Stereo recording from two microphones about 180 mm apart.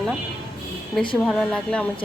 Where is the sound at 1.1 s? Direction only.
5° left (ahead or behind).